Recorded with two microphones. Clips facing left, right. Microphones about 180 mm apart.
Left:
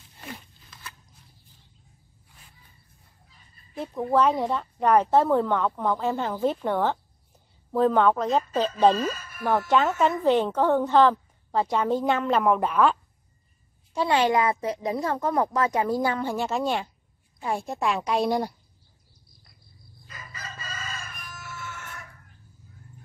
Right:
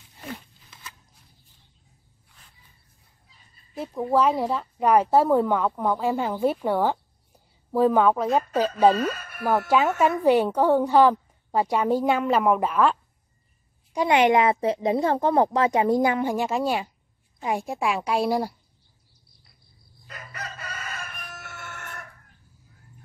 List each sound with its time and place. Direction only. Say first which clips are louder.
3.7 s speech: right 1 dB; 10° right (ahead or behind)
8.9 s speech: right 2 dB; 60° right (ahead or behind)
9.7 s speech: right 1 dB; 10° right (ahead or behind)
13.9 s a child's voice: right 3 dB; 15° right (ahead or behind)
20.1 s chicken: right 4 dB; 65° right (ahead or behind)